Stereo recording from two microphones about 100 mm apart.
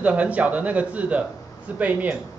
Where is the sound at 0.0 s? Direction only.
15° right (ahead or behind).